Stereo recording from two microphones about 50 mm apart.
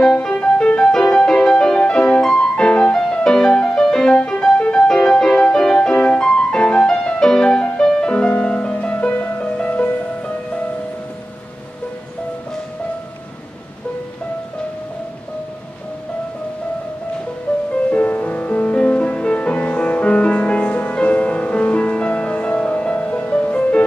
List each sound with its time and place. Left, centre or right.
0.0 s music: centre
17.5 s music: left